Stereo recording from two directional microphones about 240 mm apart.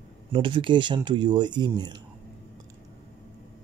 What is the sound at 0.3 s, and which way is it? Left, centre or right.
Speech, right.